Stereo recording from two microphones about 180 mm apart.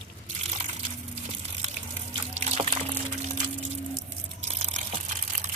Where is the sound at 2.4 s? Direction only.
40° right (ahead or behind).